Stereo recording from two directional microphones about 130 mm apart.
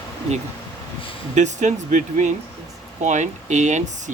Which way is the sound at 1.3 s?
65° right (ahead or behind).